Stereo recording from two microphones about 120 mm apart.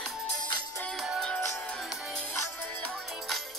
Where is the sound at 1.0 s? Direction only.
5° right (ahead or behind).